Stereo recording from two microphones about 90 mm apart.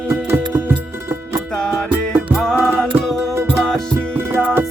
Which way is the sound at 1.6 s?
10° left (ahead or behind).